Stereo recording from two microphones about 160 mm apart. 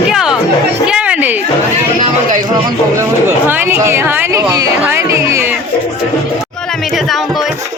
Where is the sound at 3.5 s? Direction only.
10° right (ahead or behind).